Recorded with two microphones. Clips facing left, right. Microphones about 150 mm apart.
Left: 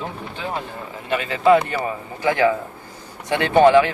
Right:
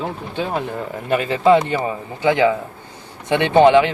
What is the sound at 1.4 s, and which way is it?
A man's voice, 20° right (ahead or behind).